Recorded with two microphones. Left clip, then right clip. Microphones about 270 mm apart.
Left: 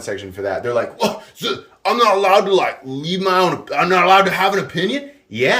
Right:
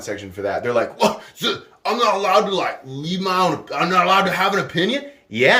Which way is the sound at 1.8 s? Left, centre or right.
Centre.